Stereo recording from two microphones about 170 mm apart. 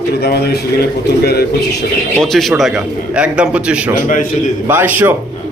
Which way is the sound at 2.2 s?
Centre (ahead or behind).